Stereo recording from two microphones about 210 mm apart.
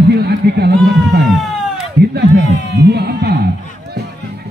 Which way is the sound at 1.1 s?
50° right (ahead or behind).